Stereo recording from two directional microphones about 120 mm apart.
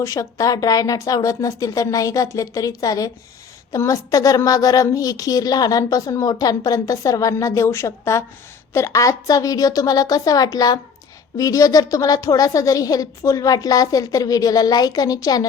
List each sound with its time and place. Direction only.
0.0 s a woman's voice: 30° left (ahead or behind)